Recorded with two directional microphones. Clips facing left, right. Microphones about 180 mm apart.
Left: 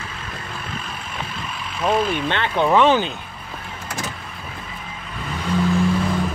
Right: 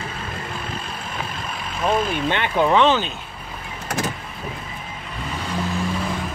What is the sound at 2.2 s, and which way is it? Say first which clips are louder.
Speech: right 1 dB; 15° right (ahead or behind).